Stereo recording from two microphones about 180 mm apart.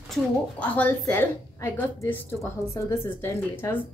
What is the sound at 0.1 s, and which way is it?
A woman's voice, 10° left (ahead or behind).